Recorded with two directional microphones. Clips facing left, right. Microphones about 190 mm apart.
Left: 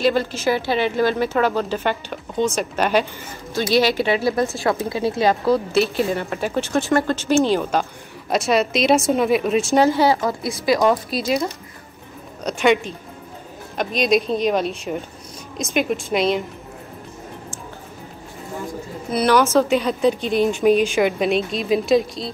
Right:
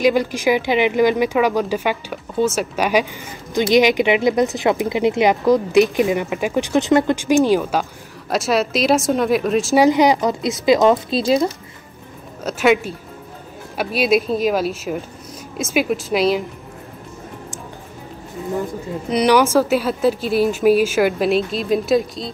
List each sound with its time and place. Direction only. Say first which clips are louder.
0.0 s speech: right 3 dB; 15° right (ahead or behind)
9.8 s speech: right 3 dB; 15° right (ahead or behind)
12.4 s speech: right 1 dB; 5° right (ahead or behind)
19.0 s speech: right 2 dB; 15° right (ahead or behind)